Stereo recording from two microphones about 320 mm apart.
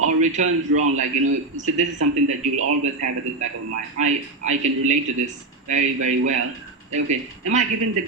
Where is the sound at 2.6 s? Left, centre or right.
Right.